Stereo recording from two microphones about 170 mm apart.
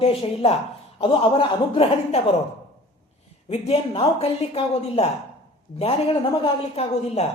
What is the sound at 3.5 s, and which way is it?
Speech, 35° left (ahead or behind).